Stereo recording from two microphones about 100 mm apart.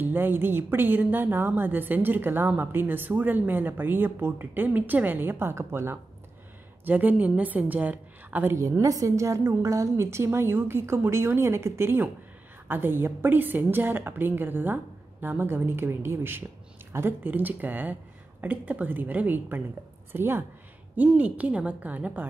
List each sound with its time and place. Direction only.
0.0 s a woman's voice: 20° right (ahead or behind)
8.5 s a woman's voice: 30° right (ahead or behind); by 22.2 s 15° right (ahead or behind)